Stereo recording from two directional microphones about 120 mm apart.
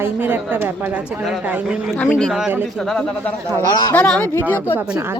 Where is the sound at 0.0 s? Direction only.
15° right (ahead or behind).